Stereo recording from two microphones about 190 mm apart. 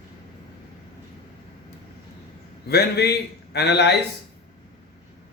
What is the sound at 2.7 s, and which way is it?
Speech, 55° left (ahead or behind).